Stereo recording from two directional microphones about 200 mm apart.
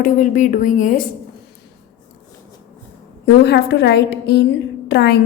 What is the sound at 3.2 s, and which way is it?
A woman's voice, 55° left (ahead or behind).